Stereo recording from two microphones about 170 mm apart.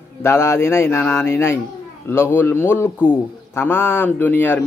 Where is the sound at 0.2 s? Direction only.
15° left (ahead or behind).